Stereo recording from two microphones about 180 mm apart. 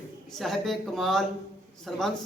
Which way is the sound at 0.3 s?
Centre (ahead or behind).